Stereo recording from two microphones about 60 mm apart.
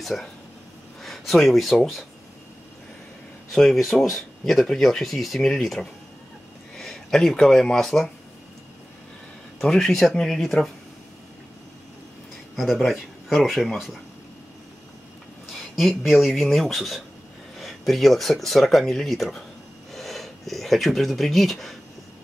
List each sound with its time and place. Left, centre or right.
0.0 s speech: centre
3.5 s speech: centre
9.6 s speech: centre
12.5 s speech: centre
16.0 s speech: centre